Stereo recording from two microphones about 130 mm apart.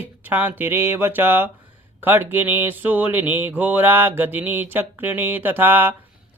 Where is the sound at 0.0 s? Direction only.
15° right (ahead or behind).